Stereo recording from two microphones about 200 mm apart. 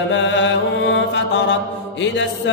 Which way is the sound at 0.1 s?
65° left (ahead or behind).